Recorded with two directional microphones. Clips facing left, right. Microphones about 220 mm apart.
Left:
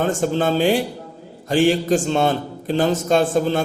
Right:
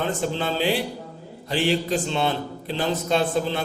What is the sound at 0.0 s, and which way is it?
A man's voice, 45° left (ahead or behind).